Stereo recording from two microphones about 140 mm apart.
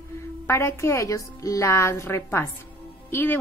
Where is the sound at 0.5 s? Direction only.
20° left (ahead or behind).